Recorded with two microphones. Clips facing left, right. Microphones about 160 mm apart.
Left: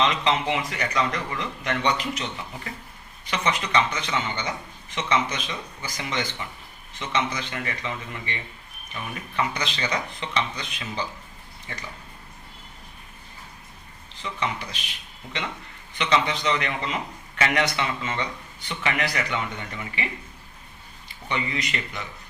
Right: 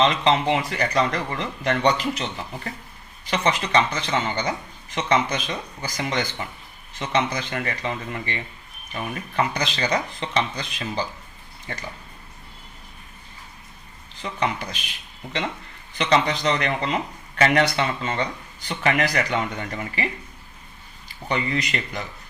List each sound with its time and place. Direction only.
0.0 s a man's voice: 35° right (ahead or behind)
3.2 s a man's voice: 35° right (ahead or behind)
11.7 s speech: 45° right (ahead or behind)
14.2 s speech: 40° right (ahead or behind)
16.0 s a man's voice: 35° right (ahead or behind)
21.2 s a man's voice: 40° right (ahead or behind)